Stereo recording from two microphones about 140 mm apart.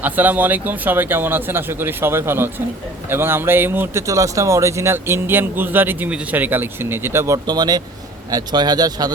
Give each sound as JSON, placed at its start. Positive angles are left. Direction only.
{"t": 0.0, "sound": "speech", "side_deg": -10}
{"t": 7.4, "sound": "a man's voice", "side_deg": -30}